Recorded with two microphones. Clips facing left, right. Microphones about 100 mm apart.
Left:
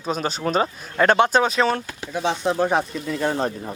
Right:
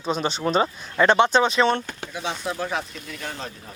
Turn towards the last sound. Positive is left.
turn(degrees=40)  # may be behind; listen again after turning